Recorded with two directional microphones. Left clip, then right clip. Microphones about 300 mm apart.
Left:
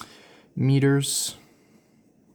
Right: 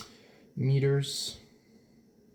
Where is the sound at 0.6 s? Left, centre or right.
Centre.